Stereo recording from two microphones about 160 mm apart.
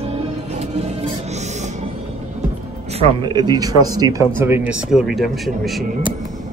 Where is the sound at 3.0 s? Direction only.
30° right (ahead or behind); by 5.8 s centre (ahead or behind).